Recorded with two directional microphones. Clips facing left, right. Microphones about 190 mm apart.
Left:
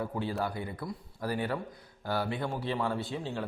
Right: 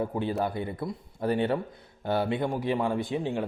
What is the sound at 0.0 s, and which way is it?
A man's voice, 20° right (ahead or behind).